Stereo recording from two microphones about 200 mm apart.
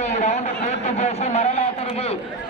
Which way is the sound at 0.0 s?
35° left (ahead or behind).